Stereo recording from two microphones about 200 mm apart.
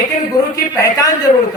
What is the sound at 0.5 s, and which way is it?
Speech, 15° left (ahead or behind).